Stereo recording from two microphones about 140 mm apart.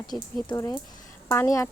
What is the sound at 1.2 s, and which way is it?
Speech, 20° left (ahead or behind).